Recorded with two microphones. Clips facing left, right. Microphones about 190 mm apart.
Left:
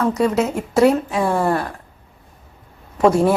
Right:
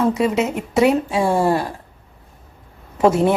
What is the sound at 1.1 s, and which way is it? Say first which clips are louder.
Speech: right 1 dB; 25° right (ahead or behind).